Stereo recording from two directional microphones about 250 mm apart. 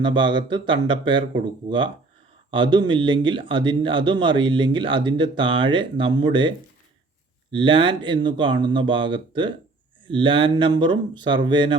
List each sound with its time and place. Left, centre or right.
0.0 s speech: centre
7.5 s speech: centre